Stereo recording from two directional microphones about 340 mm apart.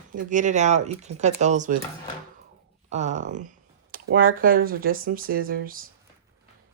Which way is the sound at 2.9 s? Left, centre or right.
Right.